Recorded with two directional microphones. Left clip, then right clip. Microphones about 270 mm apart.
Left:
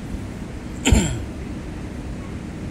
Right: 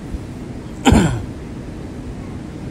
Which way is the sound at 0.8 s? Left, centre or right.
Centre.